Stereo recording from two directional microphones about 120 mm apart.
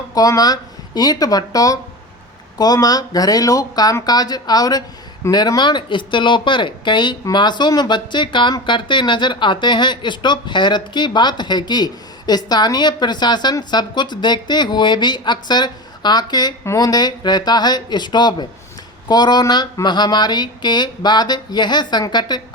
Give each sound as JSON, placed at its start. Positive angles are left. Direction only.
{"t": 0.1, "sound": "speech", "side_deg": 30}